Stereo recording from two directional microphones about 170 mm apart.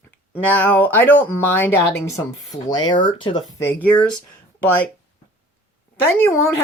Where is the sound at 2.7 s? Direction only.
25° left (ahead or behind).